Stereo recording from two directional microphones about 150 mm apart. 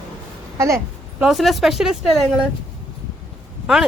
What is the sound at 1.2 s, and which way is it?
Speech, centre (ahead or behind).